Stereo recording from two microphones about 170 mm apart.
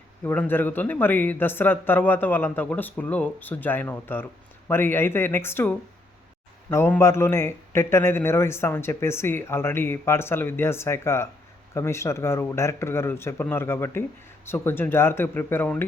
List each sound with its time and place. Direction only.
0.3 s a man's voice: 10° left (ahead or behind)